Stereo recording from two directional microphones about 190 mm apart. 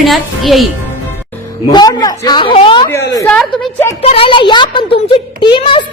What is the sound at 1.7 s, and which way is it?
A woman's voice, 20° left (ahead or behind).